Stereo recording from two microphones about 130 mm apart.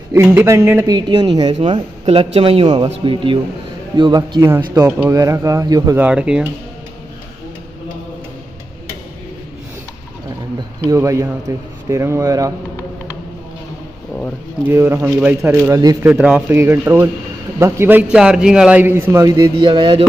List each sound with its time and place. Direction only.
0.1 s speech: 15° right (ahead or behind)
0.9 s speech: 30° right (ahead or behind)
1.5 s a man's voice: 50° right (ahead or behind); by 5.9 s 25° right (ahead or behind)
5.9 s a man's voice: 10° right (ahead or behind)
10.9 s speech: 25° right (ahead or behind)
14.7 s a man's voice: 20° right (ahead or behind)
15.7 s speech: 30° right (ahead or behind)
16.1 s a man's voice: 10° right (ahead or behind)
19.2 s speech: 35° right (ahead or behind)